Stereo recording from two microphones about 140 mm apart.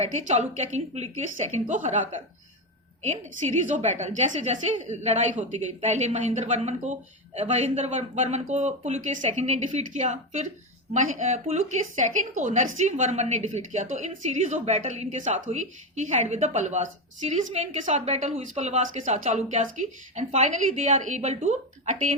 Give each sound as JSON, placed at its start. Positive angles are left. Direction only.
{"t": 0.0, "sound": "a woman's voice", "side_deg": -55}
{"t": 3.7, "sound": "a woman's voice", "side_deg": -55}